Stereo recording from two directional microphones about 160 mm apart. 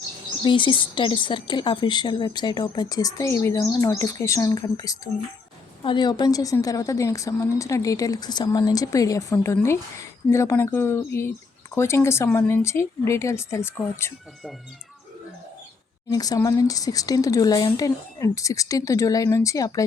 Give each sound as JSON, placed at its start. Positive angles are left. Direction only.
{"t": 0.4, "sound": "a woman's voice", "side_deg": 30}
{"t": 16.0, "sound": "a woman's voice", "side_deg": 25}